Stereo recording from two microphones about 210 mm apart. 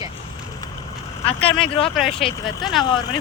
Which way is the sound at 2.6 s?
Centre (ahead or behind).